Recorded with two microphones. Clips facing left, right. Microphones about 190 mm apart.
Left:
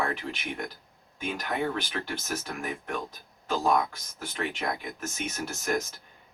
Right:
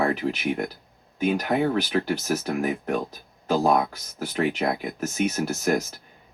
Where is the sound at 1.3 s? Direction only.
40° right (ahead or behind).